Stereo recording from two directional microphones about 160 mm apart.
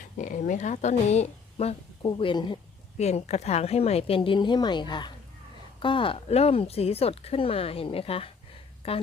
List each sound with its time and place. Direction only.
0.2 s speech: 50° left (ahead or behind)
2.0 s speech: 30° left (ahead or behind)
3.0 s speech: 45° left (ahead or behind)